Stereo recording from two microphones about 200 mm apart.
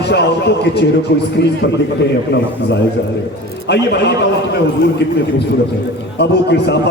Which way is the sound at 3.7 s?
55° left (ahead or behind).